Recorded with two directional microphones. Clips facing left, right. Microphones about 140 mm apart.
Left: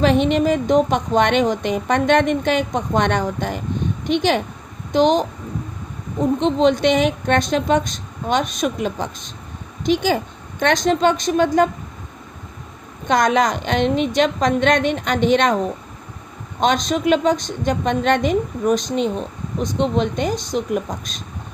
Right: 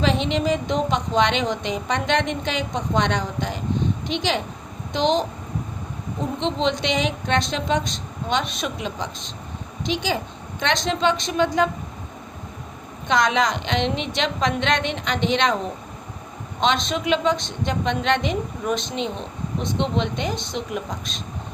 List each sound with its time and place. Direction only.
0.0 s speech: 50° left (ahead or behind)
6.4 s speech: 50° left (ahead or behind)
13.1 s speech: 50° left (ahead or behind)
16.6 s speech: 45° left (ahead or behind)